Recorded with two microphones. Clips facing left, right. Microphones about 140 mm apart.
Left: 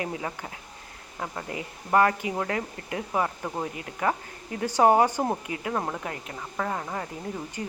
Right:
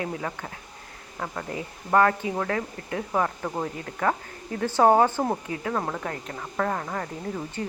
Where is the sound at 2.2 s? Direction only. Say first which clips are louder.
Right 1 dB; 15° left (ahead or behind).